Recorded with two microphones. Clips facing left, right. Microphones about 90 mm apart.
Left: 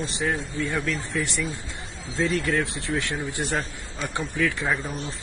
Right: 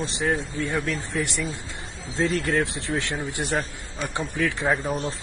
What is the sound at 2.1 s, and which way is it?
Speech, 30° right (ahead or behind).